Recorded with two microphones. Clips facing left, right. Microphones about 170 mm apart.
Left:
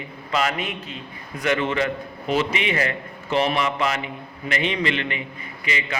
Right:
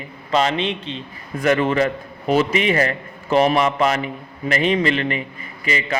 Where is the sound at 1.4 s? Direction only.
50° right (ahead or behind).